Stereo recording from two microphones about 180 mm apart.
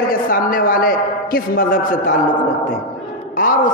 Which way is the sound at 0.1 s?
50° left (ahead or behind).